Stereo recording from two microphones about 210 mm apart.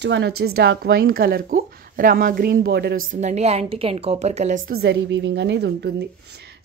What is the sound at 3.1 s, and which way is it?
Speech, 35° right (ahead or behind).